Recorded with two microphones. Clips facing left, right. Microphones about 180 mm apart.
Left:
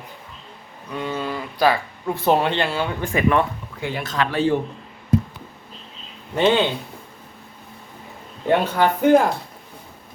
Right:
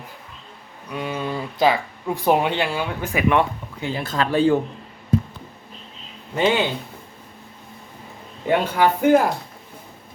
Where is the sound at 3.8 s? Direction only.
30° right (ahead or behind).